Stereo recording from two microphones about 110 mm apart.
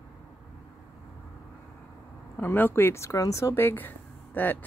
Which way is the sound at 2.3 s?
20° left (ahead or behind).